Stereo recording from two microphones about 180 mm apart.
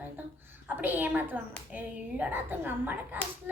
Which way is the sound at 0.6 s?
10° right (ahead or behind).